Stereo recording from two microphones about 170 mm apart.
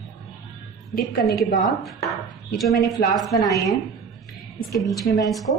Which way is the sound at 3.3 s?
20° left (ahead or behind).